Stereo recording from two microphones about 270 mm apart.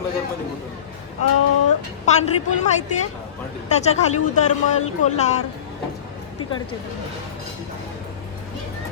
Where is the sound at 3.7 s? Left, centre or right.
Left.